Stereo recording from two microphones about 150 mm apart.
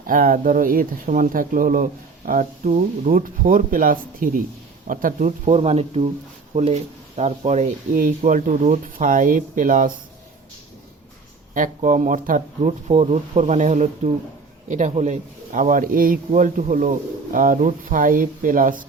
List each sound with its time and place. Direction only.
0.1 s speech: 65° right (ahead or behind)
5.5 s speech: 40° right (ahead or behind); by 9.9 s 60° right (ahead or behind)
11.5 s speech: 60° right (ahead or behind)
12.9 s speech: 45° right (ahead or behind); by 18.9 s 65° right (ahead or behind)